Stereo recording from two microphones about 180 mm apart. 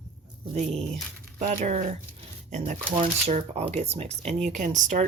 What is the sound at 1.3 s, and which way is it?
Speech, 40° right (ahead or behind).